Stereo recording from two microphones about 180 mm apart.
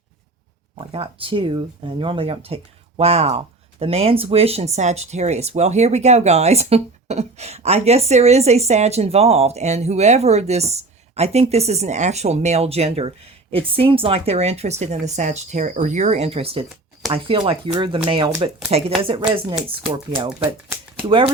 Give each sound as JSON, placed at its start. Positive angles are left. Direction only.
{"t": 0.9, "sound": "speech", "side_deg": -30}